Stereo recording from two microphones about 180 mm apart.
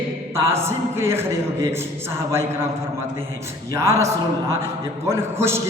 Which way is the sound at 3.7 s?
15° right (ahead or behind).